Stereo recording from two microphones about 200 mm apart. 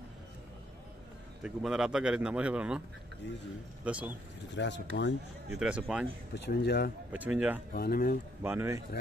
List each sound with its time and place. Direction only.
1.4 s speech: centre (ahead or behind)
3.2 s speech: 65° left (ahead or behind)
3.8 s speech: 5° right (ahead or behind)
4.6 s speech: 60° left (ahead or behind)
5.6 s speech: 5° right (ahead or behind)
6.3 s speech: 55° left (ahead or behind)
7.1 s speech: 5° right (ahead or behind)
7.7 s speech: 50° left (ahead or behind)
8.4 s speech: 15° right (ahead or behind)